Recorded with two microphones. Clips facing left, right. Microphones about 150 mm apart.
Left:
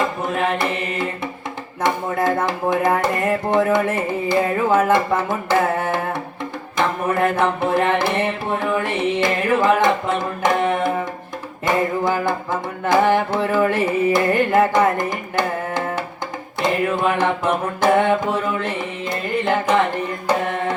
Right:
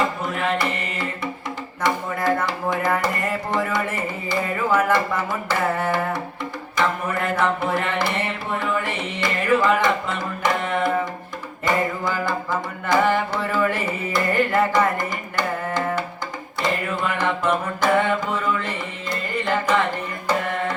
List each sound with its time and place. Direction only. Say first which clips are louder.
0.2 s music: left 3 dB; 50° left (ahead or behind)
4.3 s carnatic music: left 4 dB; 50° left (ahead or behind)
6.7 s mantra: left 4 dB; 50° left (ahead or behind)
8.5 s carnatic music: left 2 dB; 50° left (ahead or behind)
16.6 s mantra: left 5 dB; 50° left (ahead or behind)
19.1 s music: left 3 dB; 50° left (ahead or behind)
20.2 s carnatic music: left 2 dB; 50° left (ahead or behind)